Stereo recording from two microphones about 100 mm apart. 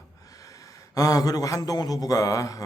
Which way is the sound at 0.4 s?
35° left (ahead or behind).